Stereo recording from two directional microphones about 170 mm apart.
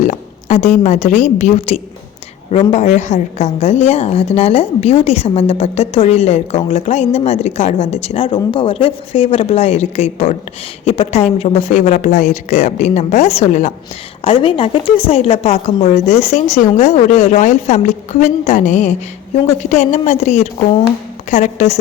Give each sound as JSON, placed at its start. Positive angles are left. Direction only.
{"t": 0.1, "sound": "a woman's voice", "side_deg": 40}
{"t": 14.3, "sound": "a woman's voice", "side_deg": 30}